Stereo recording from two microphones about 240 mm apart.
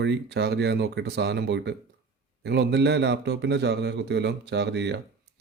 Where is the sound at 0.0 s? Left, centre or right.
Right.